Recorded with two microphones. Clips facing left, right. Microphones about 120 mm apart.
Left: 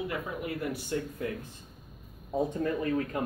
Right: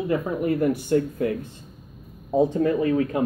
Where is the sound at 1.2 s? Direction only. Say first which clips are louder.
Right 10 dB; 65° right (ahead or behind).